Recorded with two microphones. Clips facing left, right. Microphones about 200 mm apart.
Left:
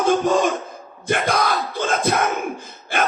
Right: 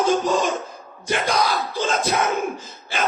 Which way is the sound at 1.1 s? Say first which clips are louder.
Left 1 dB; 55° left (ahead or behind).